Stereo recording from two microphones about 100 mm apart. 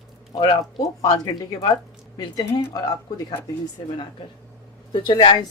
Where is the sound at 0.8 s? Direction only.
35° left (ahead or behind).